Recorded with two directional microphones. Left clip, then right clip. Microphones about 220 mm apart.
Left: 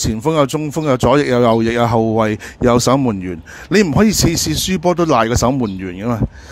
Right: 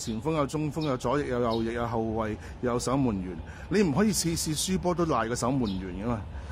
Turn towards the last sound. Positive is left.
turn(degrees=35)  # may be behind; listen again after turning